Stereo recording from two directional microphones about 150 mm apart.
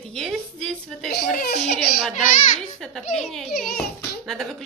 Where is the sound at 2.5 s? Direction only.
5° left (ahead or behind).